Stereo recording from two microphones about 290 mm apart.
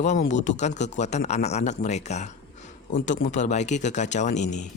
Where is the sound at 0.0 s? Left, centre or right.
Left.